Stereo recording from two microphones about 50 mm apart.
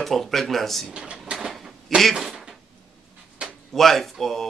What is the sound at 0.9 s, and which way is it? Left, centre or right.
Speech, centre.